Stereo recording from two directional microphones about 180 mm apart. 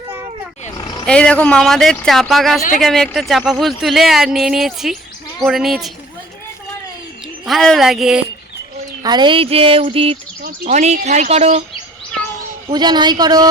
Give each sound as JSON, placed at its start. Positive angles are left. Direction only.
{"t": 1.0, "sound": "speech", "side_deg": 5}
{"t": 7.4, "sound": "speech", "side_deg": 0}
{"t": 9.0, "sound": "speech", "side_deg": -25}
{"t": 12.7, "sound": "speech", "side_deg": -25}